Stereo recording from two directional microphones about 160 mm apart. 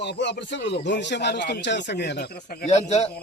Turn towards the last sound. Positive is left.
turn(degrees=45)  # may be behind; listen again after turning